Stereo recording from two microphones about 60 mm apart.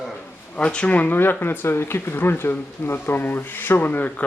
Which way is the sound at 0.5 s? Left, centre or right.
Centre.